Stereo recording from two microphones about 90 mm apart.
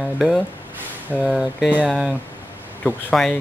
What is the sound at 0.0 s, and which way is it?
Speech, 5° right (ahead or behind).